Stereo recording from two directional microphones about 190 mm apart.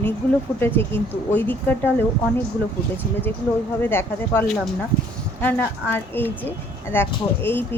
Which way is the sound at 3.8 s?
10° left (ahead or behind).